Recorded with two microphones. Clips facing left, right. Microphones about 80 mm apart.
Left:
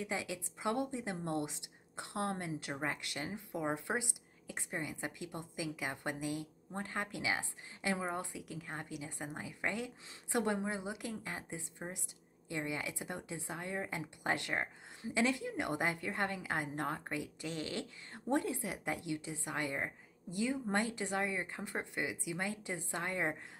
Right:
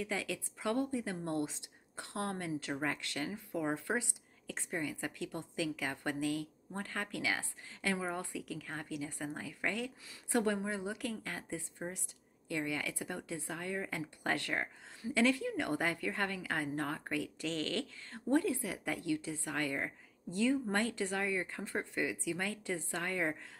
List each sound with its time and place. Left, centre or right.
0.0 s a woman's voice: centre